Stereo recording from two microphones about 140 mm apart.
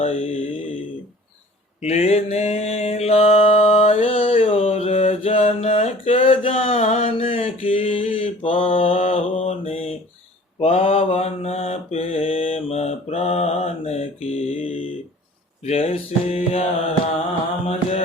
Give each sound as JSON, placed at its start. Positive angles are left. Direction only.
{"t": 0.0, "sound": "mantra", "side_deg": 45}
{"t": 1.8, "sound": "mantra", "side_deg": 50}
{"t": 15.6, "sound": "music", "side_deg": 45}
{"t": 17.7, "sound": "music", "side_deg": 45}